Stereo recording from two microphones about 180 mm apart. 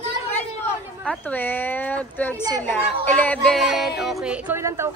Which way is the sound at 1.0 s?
10° left (ahead or behind).